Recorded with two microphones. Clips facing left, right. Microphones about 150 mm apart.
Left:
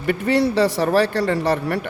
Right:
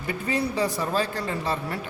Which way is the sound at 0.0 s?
75° left (ahead or behind).